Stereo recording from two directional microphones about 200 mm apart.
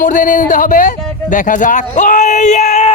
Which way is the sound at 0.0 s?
40° left (ahead or behind).